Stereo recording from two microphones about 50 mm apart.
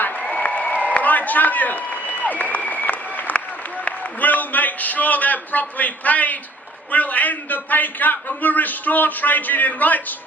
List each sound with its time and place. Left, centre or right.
0.2 s a sound: left
0.9 s applause: left
3.8 s a man's voice: left